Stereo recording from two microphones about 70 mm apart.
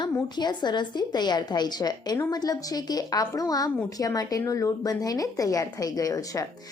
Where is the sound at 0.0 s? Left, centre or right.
Left.